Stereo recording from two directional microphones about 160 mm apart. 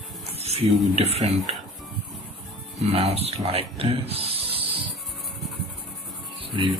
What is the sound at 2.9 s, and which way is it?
Speech, 40° right (ahead or behind).